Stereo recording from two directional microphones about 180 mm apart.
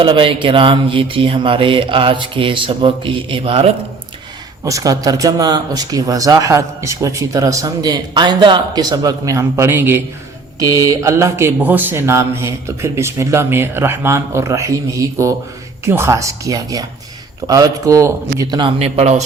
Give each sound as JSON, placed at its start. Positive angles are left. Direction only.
{"t": 0.0, "sound": "speech", "side_deg": -30}
{"t": 4.6, "sound": "speech", "side_deg": -20}
{"t": 18.8, "sound": "speech", "side_deg": -35}